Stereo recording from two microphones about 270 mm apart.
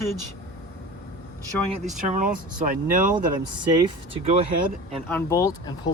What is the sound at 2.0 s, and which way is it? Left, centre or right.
Speech, right.